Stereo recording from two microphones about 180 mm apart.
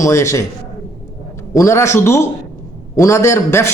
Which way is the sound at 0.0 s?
15° left (ahead or behind).